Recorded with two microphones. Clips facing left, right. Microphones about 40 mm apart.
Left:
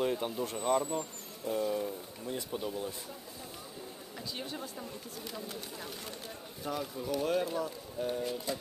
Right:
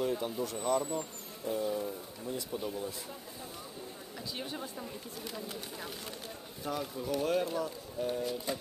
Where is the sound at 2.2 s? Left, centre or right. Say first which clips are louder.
Even; left.